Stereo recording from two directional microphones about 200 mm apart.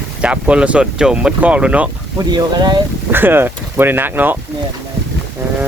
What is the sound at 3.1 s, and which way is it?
Speech, 10° right (ahead or behind).